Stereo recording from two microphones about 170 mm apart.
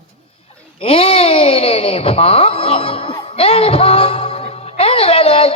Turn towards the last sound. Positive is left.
turn(degrees=35)  # may be behind; listen again after turning